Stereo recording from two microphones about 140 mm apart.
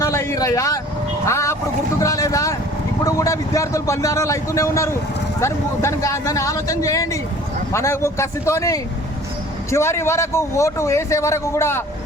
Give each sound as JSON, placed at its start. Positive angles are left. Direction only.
{"t": 0.0, "sound": "a sound", "side_deg": 20}
{"t": 1.2, "sound": "vehicle", "side_deg": 20}
{"t": 3.0, "sound": "a man's voice", "side_deg": 25}